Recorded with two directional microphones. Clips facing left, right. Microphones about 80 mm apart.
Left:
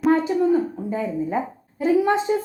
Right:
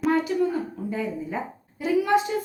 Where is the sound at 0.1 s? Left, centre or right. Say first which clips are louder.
Left 6 dB; left.